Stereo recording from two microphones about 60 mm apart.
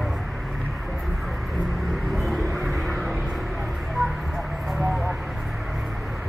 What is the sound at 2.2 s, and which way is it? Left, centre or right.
Vehicle, centre.